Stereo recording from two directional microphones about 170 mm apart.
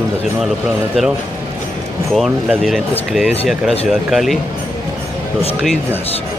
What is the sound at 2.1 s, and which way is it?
Speech, centre (ahead or behind).